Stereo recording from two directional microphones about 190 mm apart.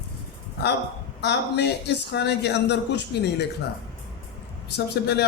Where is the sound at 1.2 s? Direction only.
60° left (ahead or behind).